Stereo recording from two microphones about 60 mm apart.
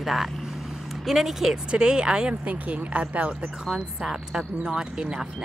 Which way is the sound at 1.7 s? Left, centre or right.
Centre.